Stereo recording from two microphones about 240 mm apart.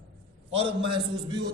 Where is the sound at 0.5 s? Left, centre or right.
Right.